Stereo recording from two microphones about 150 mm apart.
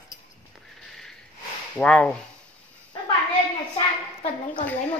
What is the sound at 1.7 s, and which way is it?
Speech, 5° left (ahead or behind).